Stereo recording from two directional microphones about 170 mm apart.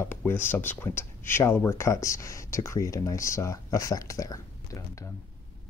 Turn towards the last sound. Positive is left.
turn(degrees=20)  # may be behind; listen again after turning